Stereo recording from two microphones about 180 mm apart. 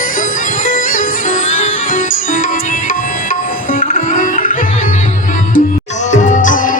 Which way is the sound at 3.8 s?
45° left (ahead or behind).